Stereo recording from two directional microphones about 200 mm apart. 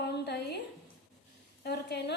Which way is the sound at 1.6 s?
55° left (ahead or behind).